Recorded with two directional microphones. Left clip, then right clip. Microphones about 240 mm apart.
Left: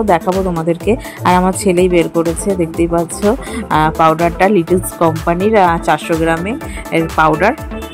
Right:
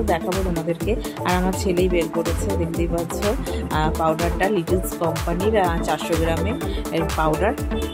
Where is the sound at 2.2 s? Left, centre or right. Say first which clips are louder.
Left 9 dB; centre.